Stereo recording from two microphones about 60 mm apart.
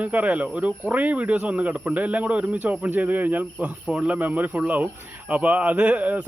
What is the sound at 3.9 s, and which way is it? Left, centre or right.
Speech, centre.